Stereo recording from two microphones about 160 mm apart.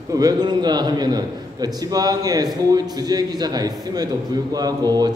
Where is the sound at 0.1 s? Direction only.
25° right (ahead or behind).